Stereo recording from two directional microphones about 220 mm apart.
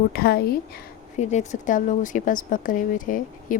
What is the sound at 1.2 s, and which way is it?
A woman's voice, 30° left (ahead or behind).